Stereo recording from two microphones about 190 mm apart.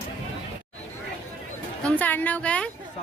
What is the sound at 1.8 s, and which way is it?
Speech, 10° left (ahead or behind).